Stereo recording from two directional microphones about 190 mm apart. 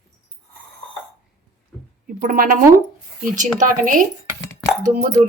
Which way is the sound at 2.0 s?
50° right (ahead or behind).